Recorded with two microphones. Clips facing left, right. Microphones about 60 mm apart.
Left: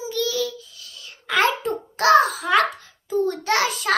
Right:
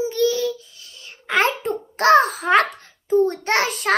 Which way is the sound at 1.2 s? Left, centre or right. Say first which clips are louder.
Right 1 dB; right.